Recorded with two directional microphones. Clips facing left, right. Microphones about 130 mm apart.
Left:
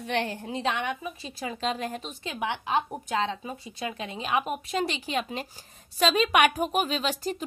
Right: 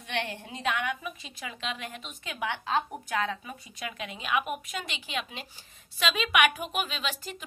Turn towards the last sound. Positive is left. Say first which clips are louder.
# left 7 dB
turn(degrees=40)  # may be behind; listen again after turning